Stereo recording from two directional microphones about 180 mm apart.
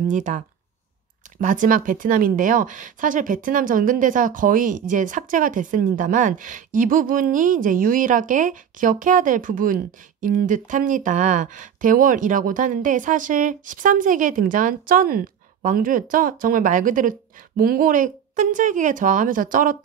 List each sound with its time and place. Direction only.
0.1 s speech: 40° right (ahead or behind)
1.4 s speech: 45° right (ahead or behind)